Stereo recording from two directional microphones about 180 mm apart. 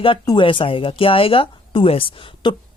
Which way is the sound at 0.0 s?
30° left (ahead or behind).